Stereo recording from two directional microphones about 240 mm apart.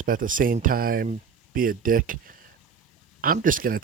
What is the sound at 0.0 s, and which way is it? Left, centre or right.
Speech, right.